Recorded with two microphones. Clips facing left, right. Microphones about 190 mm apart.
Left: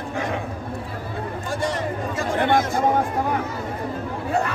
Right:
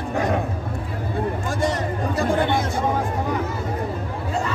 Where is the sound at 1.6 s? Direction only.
40° right (ahead or behind).